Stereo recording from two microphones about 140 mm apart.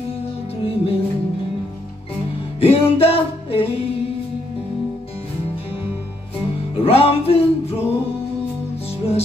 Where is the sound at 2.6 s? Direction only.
45° left (ahead or behind).